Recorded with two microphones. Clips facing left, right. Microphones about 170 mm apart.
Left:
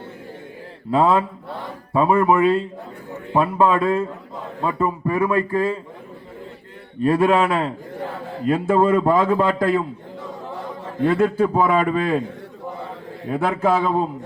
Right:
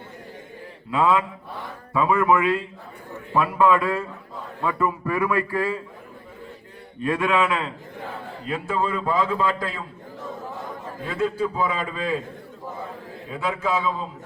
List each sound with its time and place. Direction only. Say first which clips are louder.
0.9 s a man's voice: left 4 dB; 35° left (ahead or behind)
7.0 s a man's voice: left 5 dB; 35° left (ahead or behind); by 9.8 s 55° left (ahead or behind)
11.0 s a man's voice: left 7 dB; 55° left (ahead or behind)
13.2 s a man's voice: left 7 dB; 55° left (ahead or behind)